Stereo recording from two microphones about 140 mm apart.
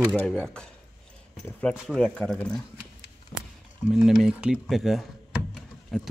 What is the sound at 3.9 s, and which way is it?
Speech, 5° right (ahead or behind).